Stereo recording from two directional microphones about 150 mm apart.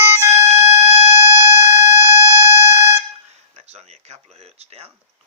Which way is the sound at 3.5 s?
45° right (ahead or behind).